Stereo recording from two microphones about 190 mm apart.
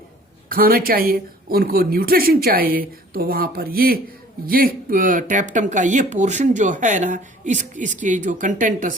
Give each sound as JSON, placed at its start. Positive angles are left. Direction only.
{"t": 0.4, "sound": "speech", "side_deg": -50}